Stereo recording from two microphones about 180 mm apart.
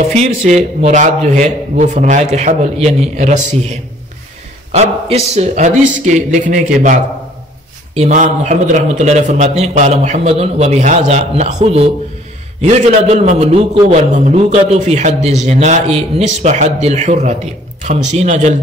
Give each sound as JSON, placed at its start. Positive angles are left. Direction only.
{"t": 0.2, "sound": "a man's voice", "side_deg": -40}
{"t": 4.7, "sound": "a man's voice", "side_deg": -40}